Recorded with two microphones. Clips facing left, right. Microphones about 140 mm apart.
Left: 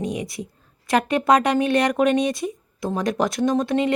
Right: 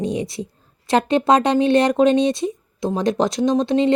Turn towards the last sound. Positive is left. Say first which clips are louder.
# right 3 dB
turn(degrees=-25)  # may be behind; listen again after turning